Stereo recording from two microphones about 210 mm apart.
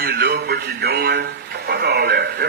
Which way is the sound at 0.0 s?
45° right (ahead or behind).